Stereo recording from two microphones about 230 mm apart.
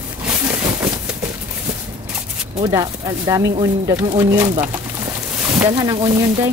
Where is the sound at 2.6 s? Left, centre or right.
Centre.